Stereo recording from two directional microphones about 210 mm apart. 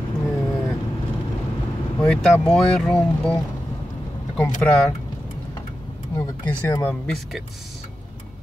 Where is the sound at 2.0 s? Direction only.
5° left (ahead or behind).